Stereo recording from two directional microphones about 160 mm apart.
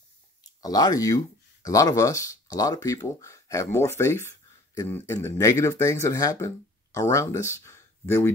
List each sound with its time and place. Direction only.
0.6 s speech: 25° left (ahead or behind)